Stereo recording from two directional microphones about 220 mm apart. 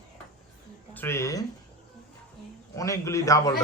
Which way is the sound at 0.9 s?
10° left (ahead or behind).